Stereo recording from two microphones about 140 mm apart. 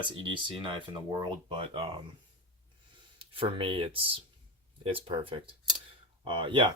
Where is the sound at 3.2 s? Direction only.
40° right (ahead or behind).